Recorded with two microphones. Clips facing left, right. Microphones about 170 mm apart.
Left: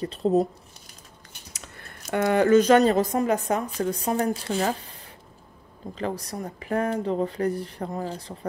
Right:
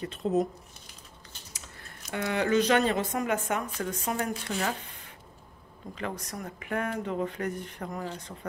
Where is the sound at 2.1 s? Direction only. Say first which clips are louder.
Left 8 dB; 45° left (ahead or behind).